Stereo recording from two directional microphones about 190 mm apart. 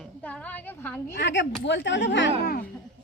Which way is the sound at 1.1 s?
70° left (ahead or behind).